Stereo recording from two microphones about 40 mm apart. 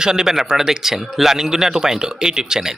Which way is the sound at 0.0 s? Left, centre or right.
Centre.